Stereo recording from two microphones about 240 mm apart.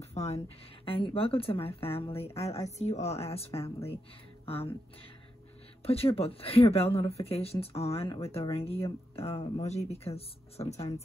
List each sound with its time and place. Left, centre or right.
0.0 s a sound: left
0.8 s speech: left
5.8 s speech: left